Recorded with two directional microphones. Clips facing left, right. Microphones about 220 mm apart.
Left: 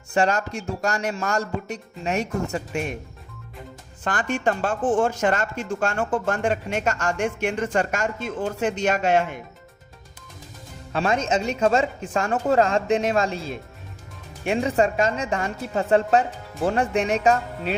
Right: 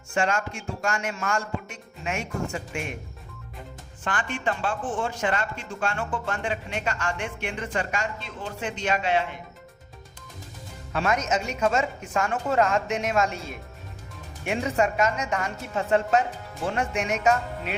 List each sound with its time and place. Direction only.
0.1 s speech: 35° left (ahead or behind)
4.0 s speech: 40° left (ahead or behind)
10.9 s speech: 30° left (ahead or behind)